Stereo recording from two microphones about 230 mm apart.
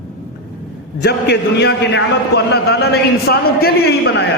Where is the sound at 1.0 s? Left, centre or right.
Left.